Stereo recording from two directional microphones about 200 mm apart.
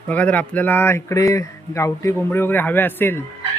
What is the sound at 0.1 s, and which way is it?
Speech, 5° left (ahead or behind).